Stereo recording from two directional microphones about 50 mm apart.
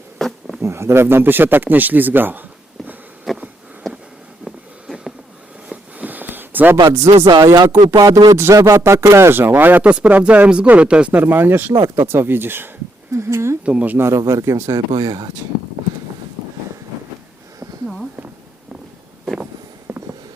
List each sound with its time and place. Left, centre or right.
0.2 s a sound: centre
0.6 s speech: right
3.3 s a sound: centre
6.0 s a sound: right
6.9 s speech: right
8.4 s speech: right
9.9 s speech: right
11.1 s speech: right
13.1 s speech: right
13.7 s speech: right
14.0 s speech: right
19.9 s a sound: right